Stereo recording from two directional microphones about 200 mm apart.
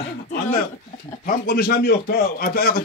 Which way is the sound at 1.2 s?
45° left (ahead or behind).